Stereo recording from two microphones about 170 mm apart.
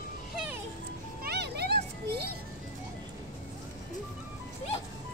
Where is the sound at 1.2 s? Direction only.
75° right (ahead or behind).